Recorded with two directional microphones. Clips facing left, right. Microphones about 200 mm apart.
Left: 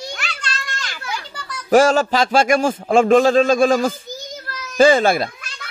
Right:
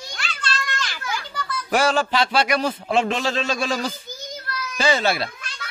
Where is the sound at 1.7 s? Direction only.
40° left (ahead or behind).